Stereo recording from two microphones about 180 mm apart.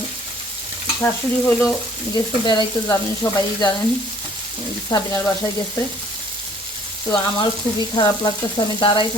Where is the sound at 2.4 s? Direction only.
25° left (ahead or behind).